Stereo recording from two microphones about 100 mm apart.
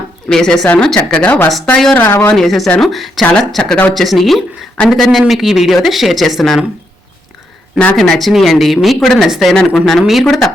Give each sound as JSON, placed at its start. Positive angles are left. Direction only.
{"t": 0.3, "sound": "speech", "side_deg": 5}
{"t": 2.0, "sound": "speech", "side_deg": 20}
{"t": 2.3, "sound": "speech", "side_deg": 5}
{"t": 7.9, "sound": "speech", "side_deg": 0}